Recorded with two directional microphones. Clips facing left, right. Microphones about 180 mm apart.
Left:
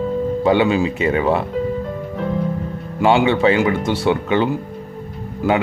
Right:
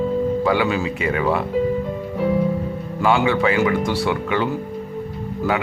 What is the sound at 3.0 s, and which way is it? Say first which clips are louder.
Speech: left 3 dB; 25° left (ahead or behind).